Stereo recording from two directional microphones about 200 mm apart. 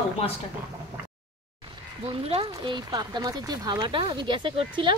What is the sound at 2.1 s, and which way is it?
Speech, 25° right (ahead or behind).